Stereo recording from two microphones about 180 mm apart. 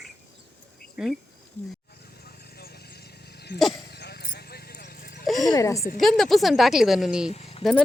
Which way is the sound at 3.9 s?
60° left (ahead or behind).